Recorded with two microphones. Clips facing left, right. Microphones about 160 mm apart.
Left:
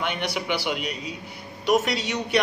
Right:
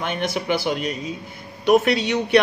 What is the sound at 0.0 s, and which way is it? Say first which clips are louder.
A man's voice: right 3 dB; 45° right (ahead or behind).